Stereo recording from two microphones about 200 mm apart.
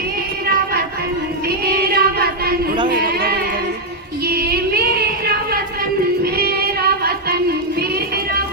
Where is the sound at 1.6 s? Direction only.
50° right (ahead or behind).